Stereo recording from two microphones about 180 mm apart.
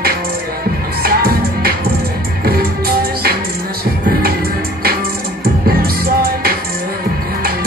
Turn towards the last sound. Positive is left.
turn(degrees=-55)  # may be behind; listen again after turning